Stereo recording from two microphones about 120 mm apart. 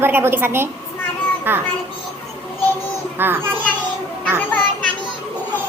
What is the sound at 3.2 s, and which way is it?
Speech, 20° right (ahead or behind).